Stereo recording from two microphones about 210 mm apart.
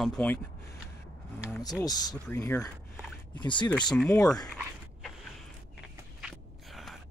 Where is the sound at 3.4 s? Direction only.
20° left (ahead or behind).